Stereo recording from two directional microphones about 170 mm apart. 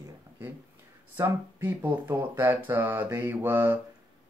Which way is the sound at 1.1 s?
10° right (ahead or behind).